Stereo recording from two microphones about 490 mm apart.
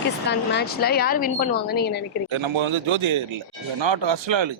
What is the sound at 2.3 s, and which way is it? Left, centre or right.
Speech, right.